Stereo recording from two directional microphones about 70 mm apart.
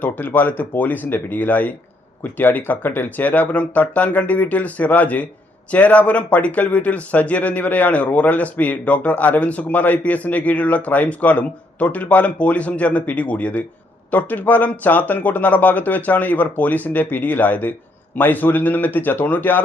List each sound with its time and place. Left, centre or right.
0.0 s speech: left